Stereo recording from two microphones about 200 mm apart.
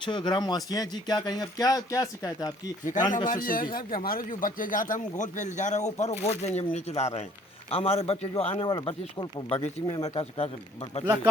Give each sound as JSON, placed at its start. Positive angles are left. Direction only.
{"t": 0.0, "sound": "speech", "side_deg": 25}
{"t": 3.2, "sound": "speech", "side_deg": 45}
{"t": 11.0, "sound": "speech", "side_deg": -10}